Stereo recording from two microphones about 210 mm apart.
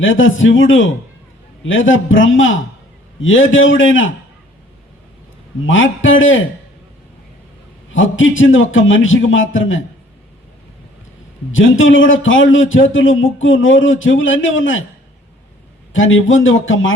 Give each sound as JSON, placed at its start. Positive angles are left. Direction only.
{"t": 0.0, "sound": "a man's voice", "side_deg": 65}
{"t": 5.6, "sound": "a man's voice", "side_deg": 65}
{"t": 7.9, "sound": "a man's voice", "side_deg": 70}
{"t": 11.5, "sound": "a man's voice", "side_deg": 65}
{"t": 15.9, "sound": "a man's voice", "side_deg": 70}